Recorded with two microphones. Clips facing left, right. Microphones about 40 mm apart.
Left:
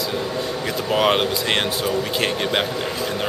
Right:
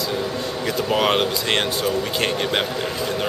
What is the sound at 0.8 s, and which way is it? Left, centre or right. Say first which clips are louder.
Speech: left 2 dB; centre.